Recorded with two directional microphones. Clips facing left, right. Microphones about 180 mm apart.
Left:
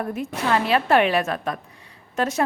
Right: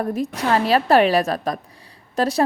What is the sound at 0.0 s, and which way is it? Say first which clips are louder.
A woman's voice: right 3 dB; 35° right (ahead or behind).